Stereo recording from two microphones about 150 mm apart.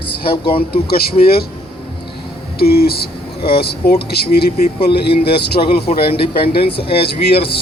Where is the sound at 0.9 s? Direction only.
85° left.